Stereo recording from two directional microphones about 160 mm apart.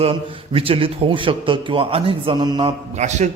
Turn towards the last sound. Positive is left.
turn(degrees=-45)  # may be behind; listen again after turning